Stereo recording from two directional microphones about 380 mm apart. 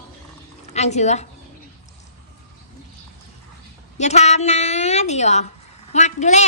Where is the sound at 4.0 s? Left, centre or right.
Centre.